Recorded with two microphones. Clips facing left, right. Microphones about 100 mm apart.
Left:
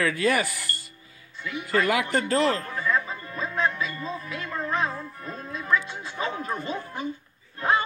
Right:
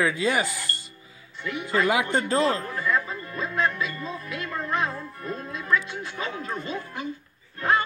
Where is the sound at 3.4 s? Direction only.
25° left (ahead or behind).